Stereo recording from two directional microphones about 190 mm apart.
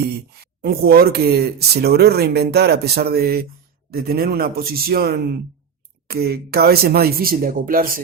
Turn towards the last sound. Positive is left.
turn(degrees=-50)  # may be behind; listen again after turning